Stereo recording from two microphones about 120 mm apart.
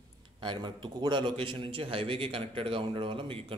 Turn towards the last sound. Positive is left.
turn(degrees=-45)  # may be behind; listen again after turning